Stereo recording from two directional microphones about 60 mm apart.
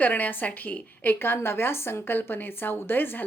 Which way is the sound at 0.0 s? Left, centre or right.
Left.